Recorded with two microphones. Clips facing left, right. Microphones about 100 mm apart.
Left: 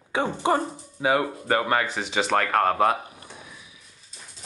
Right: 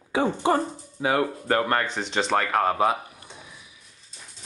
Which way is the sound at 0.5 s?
10° left (ahead or behind).